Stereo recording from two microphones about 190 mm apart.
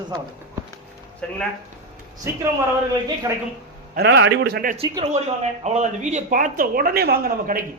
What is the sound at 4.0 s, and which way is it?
Speech, 65° right (ahead or behind).